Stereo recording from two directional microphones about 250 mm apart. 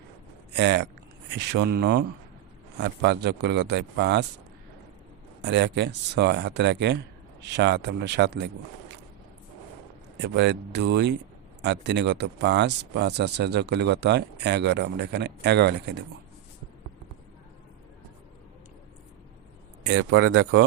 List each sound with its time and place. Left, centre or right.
0.5 s speech: right
5.4 s speech: right
10.2 s speech: right
19.9 s speech: right